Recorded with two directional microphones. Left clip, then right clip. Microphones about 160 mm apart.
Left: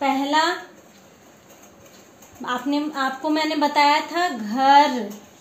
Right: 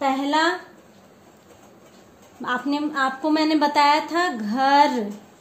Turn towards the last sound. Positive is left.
turn(degrees=-90)